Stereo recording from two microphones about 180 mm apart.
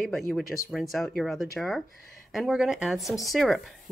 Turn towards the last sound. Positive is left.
turn(degrees=0)  # may be behind; listen again after turning